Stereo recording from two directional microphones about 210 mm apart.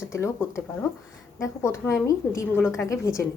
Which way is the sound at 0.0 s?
15° left (ahead or behind).